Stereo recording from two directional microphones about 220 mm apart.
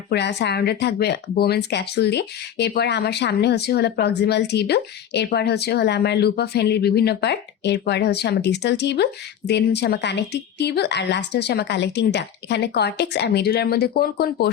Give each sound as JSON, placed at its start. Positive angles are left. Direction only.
{"t": 0.1, "sound": "speech", "side_deg": 50}